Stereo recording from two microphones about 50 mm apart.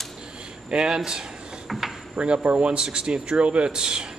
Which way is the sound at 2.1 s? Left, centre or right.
Centre.